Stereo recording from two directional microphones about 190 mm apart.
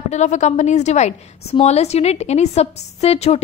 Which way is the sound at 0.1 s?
35° left (ahead or behind).